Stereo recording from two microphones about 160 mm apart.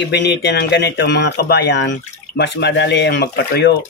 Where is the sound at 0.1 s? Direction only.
90° left.